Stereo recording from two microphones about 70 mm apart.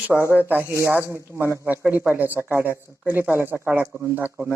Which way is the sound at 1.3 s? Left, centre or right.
Right.